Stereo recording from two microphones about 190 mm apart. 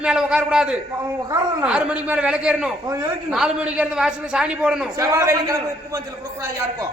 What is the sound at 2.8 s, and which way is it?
Speech, 15° right (ahead or behind).